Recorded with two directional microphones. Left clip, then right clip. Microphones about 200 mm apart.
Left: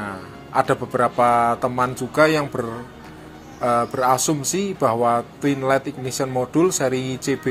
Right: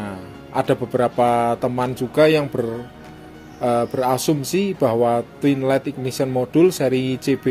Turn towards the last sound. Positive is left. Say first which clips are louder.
# right 3 dB
turn(degrees=-50)  # may be behind; listen again after turning